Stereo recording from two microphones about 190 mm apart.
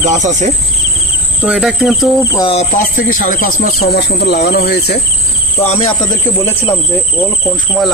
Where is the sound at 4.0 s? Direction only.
60° left (ahead or behind).